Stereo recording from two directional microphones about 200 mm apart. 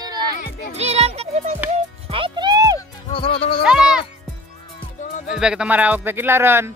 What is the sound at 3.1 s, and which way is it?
Music, 30° left (ahead or behind).